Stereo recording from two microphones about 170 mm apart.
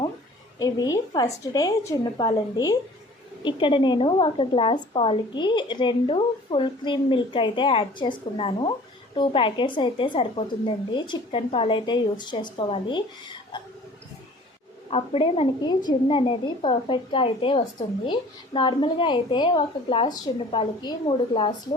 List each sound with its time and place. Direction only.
0.6 s a woman's voice: 20° left (ahead or behind)
14.8 s a woman's voice: 35° left (ahead or behind)